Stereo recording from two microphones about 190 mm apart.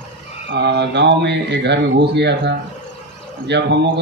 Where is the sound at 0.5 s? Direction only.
65° right (ahead or behind).